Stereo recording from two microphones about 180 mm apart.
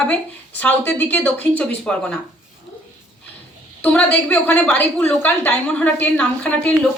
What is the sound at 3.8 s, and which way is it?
A woman's voice, 5° left (ahead or behind).